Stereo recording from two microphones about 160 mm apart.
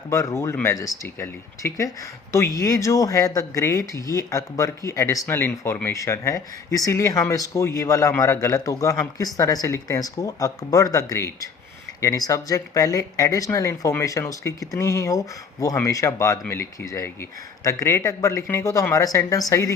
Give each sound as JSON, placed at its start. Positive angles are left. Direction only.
{"t": 0.1, "sound": "speech", "side_deg": 20}